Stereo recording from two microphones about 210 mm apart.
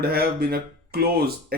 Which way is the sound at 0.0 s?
45° right (ahead or behind).